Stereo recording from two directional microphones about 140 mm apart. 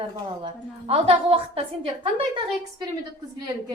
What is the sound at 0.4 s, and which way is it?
A woman's voice, 45° right (ahead or behind).